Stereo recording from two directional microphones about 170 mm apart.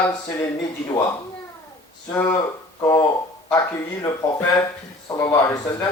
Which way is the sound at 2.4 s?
20° left (ahead or behind).